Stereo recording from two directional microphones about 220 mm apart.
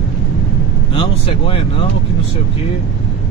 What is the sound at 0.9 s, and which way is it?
Speech, 25° left (ahead or behind).